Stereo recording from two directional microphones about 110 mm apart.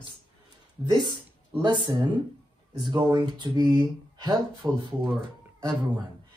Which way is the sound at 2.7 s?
45° right (ahead or behind).